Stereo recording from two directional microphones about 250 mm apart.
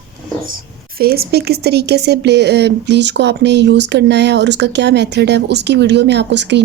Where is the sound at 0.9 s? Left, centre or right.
Right.